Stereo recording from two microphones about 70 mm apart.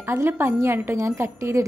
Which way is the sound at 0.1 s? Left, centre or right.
Right.